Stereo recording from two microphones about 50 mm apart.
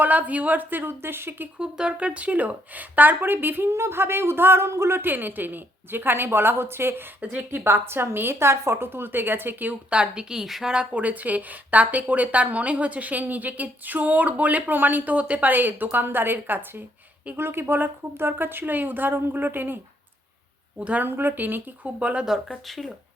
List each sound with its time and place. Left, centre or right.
0.0 s a woman's voice: right
1.5 s a woman's voice: centre; by 3.7 s right
3.7 s speech: right
7.2 s a woman's voice: right
7.5 s speech: right
9.9 s a woman's voice: centre
10.9 s a woman's voice: right
20.7 s a woman's voice: right
21.1 s speech: right
21.9 s a woman's voice: right
22.3 s speech: centre